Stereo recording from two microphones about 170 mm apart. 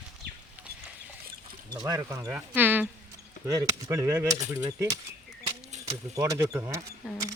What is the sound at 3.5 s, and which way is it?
Speech, 20° right (ahead or behind).